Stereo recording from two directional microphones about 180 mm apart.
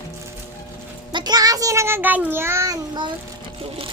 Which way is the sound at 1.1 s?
25° right (ahead or behind).